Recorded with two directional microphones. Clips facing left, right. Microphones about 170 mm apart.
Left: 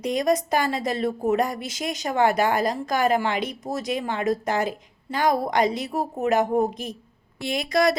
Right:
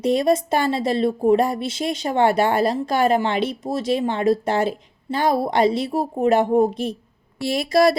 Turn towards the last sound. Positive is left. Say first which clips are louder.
# right 4 dB
turn(degrees=15)  # may be behind; listen again after turning